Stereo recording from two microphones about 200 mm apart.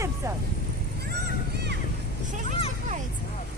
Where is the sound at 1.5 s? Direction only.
55° right (ahead or behind).